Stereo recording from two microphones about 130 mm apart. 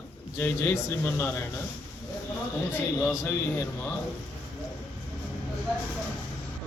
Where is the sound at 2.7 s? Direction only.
15° left (ahead or behind).